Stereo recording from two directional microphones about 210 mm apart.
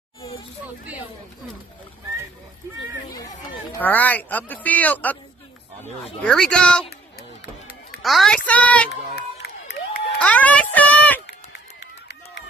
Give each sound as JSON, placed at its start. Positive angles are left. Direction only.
{"t": 0.2, "sound": "hubbub", "side_deg": 25}
{"t": 3.8, "sound": "speech", "side_deg": 10}
{"t": 6.2, "sound": "a child's voice", "side_deg": 5}
{"t": 8.0, "sound": "a child's voice", "side_deg": 0}
{"t": 9.1, "sound": "run", "side_deg": 50}
{"t": 10.1, "sound": "speech", "side_deg": 5}
{"t": 11.5, "sound": "run", "side_deg": 60}